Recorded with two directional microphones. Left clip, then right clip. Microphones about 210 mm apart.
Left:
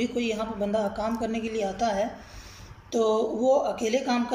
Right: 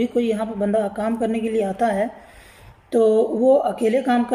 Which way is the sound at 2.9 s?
25° right (ahead or behind).